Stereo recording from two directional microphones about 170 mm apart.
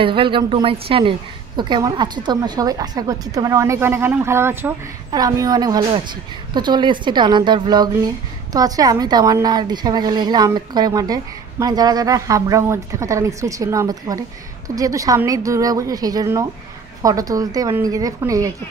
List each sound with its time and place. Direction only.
0.0 s a woman's voice: 30° right (ahead or behind)